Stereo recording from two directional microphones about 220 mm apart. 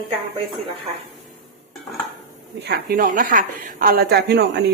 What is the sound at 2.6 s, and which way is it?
A woman's voice, 45° right (ahead or behind).